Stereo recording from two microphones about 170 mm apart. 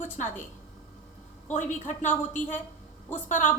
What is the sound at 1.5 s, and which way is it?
A woman's voice, 45° left (ahead or behind).